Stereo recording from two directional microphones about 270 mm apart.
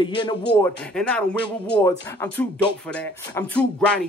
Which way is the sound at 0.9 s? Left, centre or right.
Centre.